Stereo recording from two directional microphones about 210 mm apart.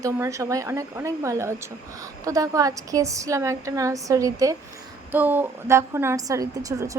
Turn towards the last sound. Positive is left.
turn(degrees=-15)  # may be behind; listen again after turning